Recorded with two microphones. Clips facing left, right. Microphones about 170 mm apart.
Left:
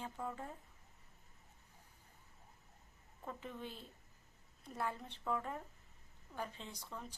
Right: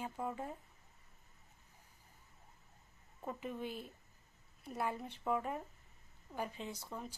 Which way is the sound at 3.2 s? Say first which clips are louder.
Right 5 dB; 15° right (ahead or behind).